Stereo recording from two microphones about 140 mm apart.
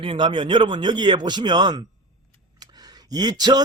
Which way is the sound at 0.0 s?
35° right (ahead or behind).